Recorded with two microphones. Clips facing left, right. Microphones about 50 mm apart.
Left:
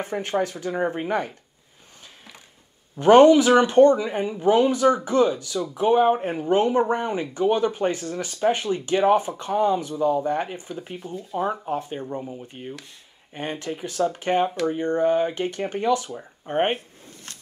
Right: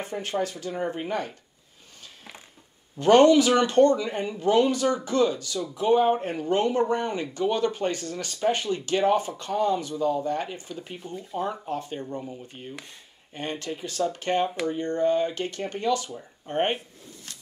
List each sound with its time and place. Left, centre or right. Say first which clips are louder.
0.0 s speech: left 4 dB; left
3.0 s speech: left 4 dB; centre
12.2 s speech: left 3 dB; centre